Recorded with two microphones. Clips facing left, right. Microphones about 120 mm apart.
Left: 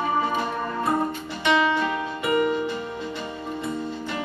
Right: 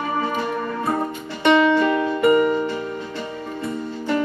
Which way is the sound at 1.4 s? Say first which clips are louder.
Right 6 dB; 55° right (ahead or behind).